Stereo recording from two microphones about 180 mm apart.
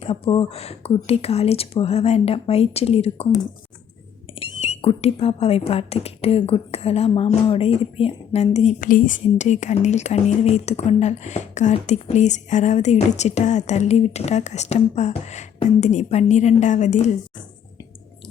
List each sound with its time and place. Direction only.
0.0 s speech: 30° left (ahead or behind)
4.4 s speech: 35° left (ahead or behind)